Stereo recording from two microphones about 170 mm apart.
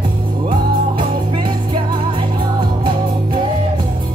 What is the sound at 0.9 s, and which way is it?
Music, 30° right (ahead or behind).